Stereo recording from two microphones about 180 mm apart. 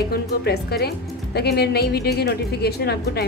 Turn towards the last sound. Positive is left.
turn(degrees=60)  # may be behind; listen again after turning